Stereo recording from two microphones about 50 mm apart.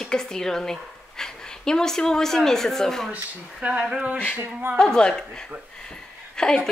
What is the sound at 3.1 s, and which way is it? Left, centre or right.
Speech, right.